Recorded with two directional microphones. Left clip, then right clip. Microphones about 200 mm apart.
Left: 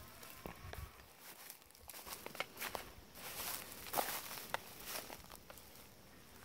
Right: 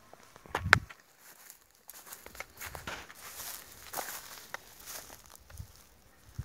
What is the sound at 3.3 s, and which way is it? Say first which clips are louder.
Walk: left 2 dB; centre (ahead or behind).